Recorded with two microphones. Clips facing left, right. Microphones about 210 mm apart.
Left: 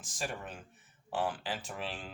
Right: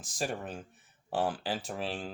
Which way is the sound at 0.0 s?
35° right (ahead or behind).